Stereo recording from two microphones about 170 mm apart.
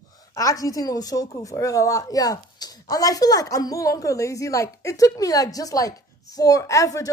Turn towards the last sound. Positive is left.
turn(degrees=20)  # may be behind; listen again after turning